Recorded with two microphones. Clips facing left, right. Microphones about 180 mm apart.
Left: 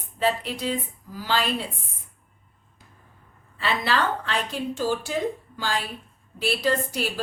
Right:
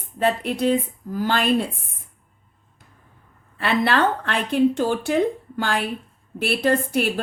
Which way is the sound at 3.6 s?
55° right (ahead or behind).